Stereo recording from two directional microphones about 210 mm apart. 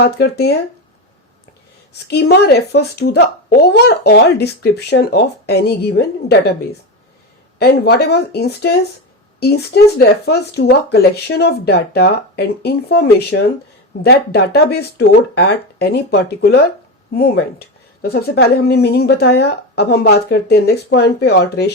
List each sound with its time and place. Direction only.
0.0 s a woman's voice: 50° left (ahead or behind)
1.9 s a woman's voice: 50° left (ahead or behind)
7.6 s a woman's voice: 50° left (ahead or behind)
10.2 s a woman's voice: 50° left (ahead or behind)